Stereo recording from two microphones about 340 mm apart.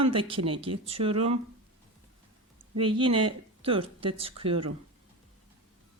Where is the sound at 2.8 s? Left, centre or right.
Centre.